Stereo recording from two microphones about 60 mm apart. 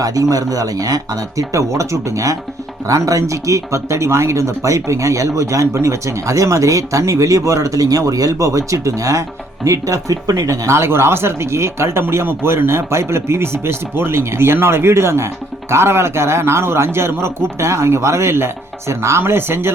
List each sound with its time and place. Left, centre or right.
0.0 s speech: right
10.8 s speech: right